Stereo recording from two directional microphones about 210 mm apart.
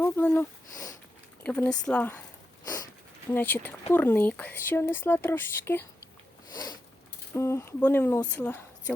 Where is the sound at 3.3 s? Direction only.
10° left (ahead or behind).